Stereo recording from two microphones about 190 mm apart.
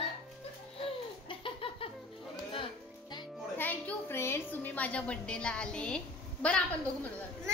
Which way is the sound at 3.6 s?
10° left (ahead or behind).